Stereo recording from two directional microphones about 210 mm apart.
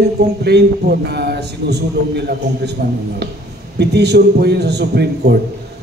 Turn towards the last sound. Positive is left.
turn(degrees=-50)  # may be behind; listen again after turning